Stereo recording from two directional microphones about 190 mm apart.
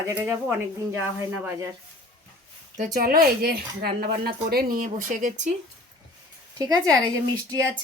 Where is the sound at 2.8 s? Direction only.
50° right (ahead or behind).